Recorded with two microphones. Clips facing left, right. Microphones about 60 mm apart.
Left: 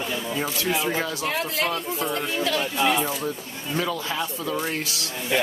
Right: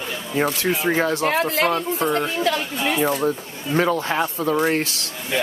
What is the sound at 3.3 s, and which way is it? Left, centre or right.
Speech, right.